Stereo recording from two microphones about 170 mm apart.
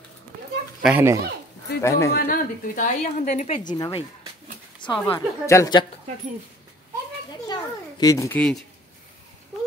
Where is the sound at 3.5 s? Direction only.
25° left (ahead or behind).